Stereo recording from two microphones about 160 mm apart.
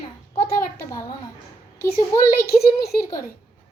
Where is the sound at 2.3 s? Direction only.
70° left (ahead or behind).